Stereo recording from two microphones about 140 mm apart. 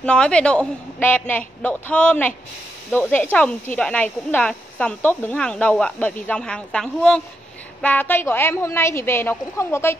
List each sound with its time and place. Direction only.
0.0 s speech: 5° left (ahead or behind)